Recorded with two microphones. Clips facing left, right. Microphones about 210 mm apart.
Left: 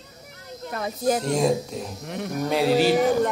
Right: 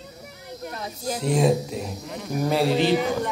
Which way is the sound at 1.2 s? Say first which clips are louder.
Right 1 dB; 5° right (ahead or behind).